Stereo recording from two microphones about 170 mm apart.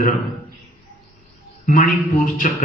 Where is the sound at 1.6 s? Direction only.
55° left (ahead or behind).